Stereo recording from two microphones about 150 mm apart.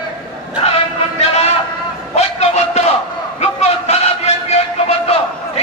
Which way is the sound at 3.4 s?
45° left (ahead or behind).